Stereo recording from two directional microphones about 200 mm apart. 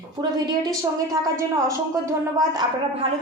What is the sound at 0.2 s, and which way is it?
Speech, 20° right (ahead or behind).